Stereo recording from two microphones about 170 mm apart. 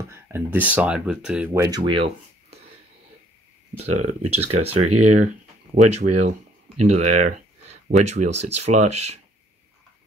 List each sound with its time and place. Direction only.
0.1 s speech: 10° right (ahead or behind)
1.8 s speech: 30° right (ahead or behind)
3.7 s speech: 40° right (ahead or behind)